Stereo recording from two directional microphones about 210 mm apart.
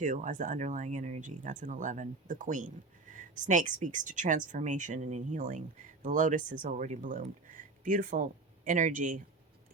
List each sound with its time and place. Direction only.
0.0 s speech: 35° right (ahead or behind)